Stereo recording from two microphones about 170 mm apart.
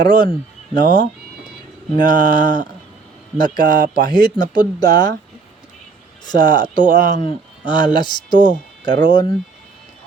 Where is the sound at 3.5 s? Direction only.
55° right (ahead or behind).